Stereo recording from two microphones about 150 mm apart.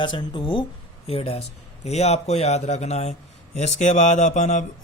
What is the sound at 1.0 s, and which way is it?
A man's voice, 40° left (ahead or behind).